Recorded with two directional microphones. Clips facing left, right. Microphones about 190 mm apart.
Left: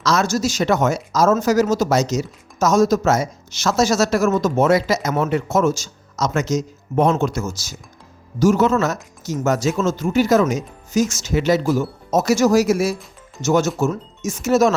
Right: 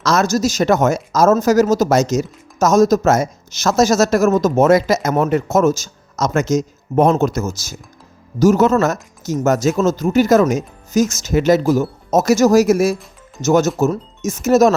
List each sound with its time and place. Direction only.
0.0 s speech: 45° right (ahead or behind)